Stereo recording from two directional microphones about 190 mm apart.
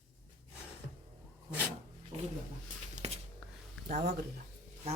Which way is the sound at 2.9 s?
35° right (ahead or behind).